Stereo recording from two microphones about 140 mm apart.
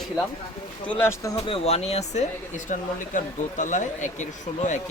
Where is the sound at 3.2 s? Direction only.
60° left (ahead or behind).